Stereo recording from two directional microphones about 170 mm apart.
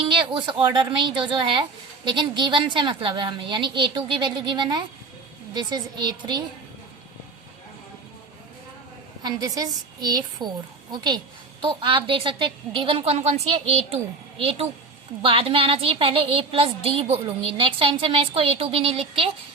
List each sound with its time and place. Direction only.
0.0 s a woman's voice: 30° right (ahead or behind)
9.2 s a woman's voice: 20° right (ahead or behind)